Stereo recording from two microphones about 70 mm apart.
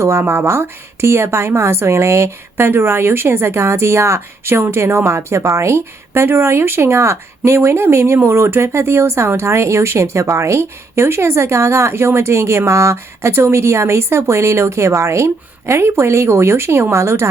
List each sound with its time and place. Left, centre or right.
0.0 s a woman's voice: right